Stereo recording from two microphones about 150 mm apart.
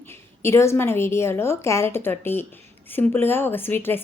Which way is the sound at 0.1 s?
20° left (ahead or behind).